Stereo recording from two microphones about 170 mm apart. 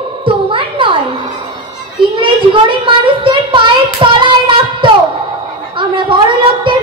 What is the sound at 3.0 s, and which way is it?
Child singing, 30° right (ahead or behind).